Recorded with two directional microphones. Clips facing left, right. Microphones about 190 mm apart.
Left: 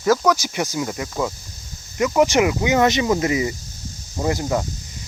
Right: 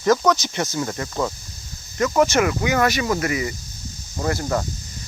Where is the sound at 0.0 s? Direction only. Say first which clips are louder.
Even; 5° left (ahead or behind).